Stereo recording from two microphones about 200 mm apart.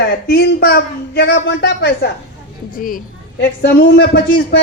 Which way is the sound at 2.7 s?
45° left (ahead or behind).